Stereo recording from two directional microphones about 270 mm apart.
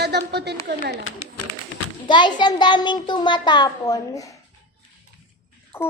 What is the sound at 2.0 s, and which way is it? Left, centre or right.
A child's voice, centre.